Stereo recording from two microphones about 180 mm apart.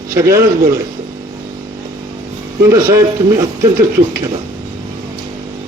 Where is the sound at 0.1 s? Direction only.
15° right (ahead or behind).